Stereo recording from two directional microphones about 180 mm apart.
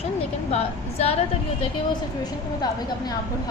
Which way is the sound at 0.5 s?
35° left (ahead or behind).